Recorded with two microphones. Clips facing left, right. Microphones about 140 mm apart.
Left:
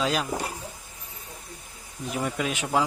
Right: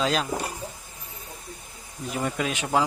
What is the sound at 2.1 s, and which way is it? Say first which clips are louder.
Speech: right 1 dB; 5° left (ahead or behind).